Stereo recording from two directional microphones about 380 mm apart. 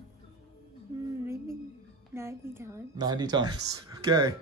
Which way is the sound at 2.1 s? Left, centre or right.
Centre.